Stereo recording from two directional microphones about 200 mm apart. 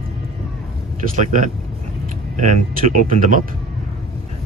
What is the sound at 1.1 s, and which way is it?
Speech, 40° right (ahead or behind).